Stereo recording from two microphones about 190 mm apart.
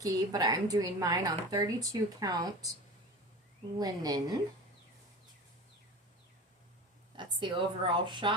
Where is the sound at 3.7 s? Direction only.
20° right (ahead or behind).